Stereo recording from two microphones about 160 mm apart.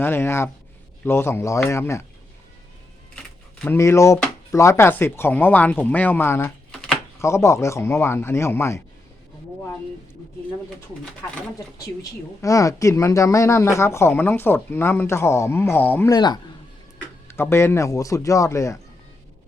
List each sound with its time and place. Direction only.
0.0 s speech: 15° left (ahead or behind)
3.6 s speech: 15° left (ahead or behind)
12.4 s speech: 20° left (ahead or behind)
16.1 s a man's voice: 25° left (ahead or behind)
17.2 s a man's voice: 15° left (ahead or behind)